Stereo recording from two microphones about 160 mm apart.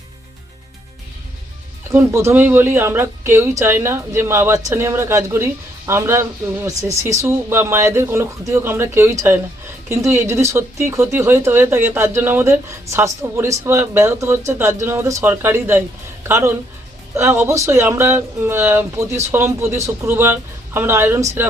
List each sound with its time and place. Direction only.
1.9 s a woman's voice: 15° right (ahead or behind)